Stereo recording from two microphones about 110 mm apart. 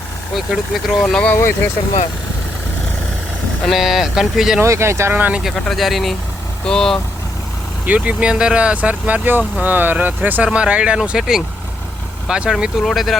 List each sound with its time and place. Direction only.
0.3 s speech: 5° right (ahead or behind)
1.0 s speech: 10° left (ahead or behind)
3.6 s speech: centre (ahead or behind)
4.6 s speech: 25° right (ahead or behind)
5.4 s speech: centre (ahead or behind)
7.9 s speech: 10° right (ahead or behind)